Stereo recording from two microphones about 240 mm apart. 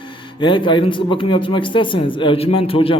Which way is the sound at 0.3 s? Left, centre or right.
Centre.